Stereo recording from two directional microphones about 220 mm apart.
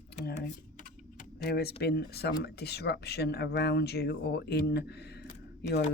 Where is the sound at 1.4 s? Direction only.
45° left (ahead or behind).